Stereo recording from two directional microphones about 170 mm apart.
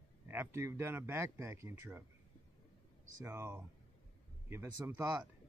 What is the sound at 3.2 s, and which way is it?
A man's voice, 15° right (ahead or behind).